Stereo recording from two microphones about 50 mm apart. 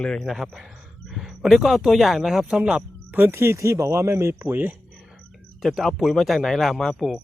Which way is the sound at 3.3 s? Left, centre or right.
Right.